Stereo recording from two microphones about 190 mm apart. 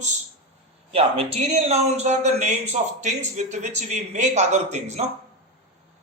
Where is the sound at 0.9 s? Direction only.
30° right (ahead or behind).